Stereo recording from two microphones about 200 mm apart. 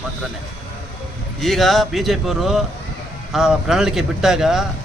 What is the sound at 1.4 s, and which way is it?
Speech, centre (ahead or behind).